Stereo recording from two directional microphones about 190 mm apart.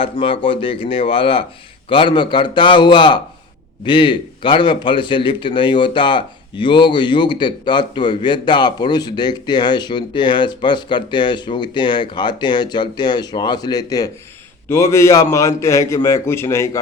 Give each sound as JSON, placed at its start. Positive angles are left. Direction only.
{"t": 0.0, "sound": "a man's voice", "side_deg": 30}